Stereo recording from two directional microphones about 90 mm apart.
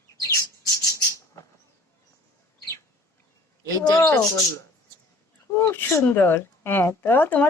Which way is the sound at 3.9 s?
20° left (ahead or behind).